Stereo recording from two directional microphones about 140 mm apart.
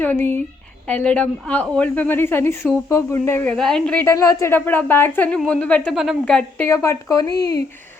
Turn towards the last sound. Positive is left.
turn(degrees=25)  # may be behind; listen again after turning